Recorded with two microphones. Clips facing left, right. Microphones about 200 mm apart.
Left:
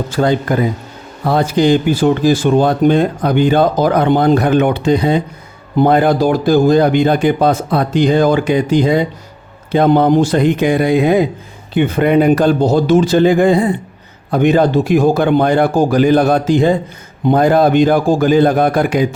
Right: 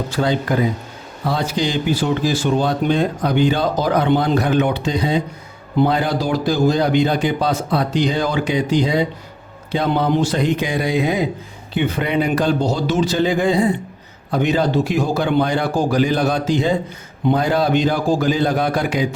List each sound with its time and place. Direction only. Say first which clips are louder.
0.1 s speech: left 5 dB; 50° left (ahead or behind)